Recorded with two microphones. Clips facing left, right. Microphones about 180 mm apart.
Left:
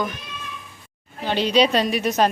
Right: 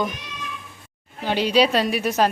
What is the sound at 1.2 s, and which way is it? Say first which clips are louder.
A woman's voice: even; 10° right (ahead or behind).